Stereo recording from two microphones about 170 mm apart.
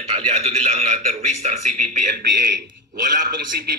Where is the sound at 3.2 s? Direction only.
50° right (ahead or behind).